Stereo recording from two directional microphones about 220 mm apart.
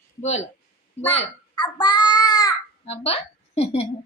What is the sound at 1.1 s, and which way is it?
Child singing, 25° left (ahead or behind).